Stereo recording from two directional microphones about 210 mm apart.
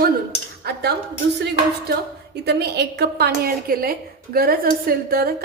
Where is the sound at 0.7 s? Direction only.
50° right (ahead or behind).